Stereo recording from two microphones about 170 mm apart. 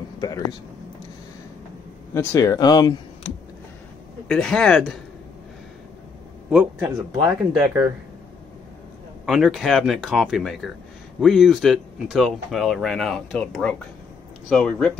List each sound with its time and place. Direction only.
0.2 s speech: 25° left (ahead or behind)
2.1 s speech: 20° left (ahead or behind)
4.3 s speech: 5° left (ahead or behind)
6.5 s speech: 10° right (ahead or behind)
9.2 s speech: centre (ahead or behind)